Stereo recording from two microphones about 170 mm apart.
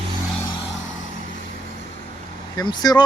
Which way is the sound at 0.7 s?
90° left.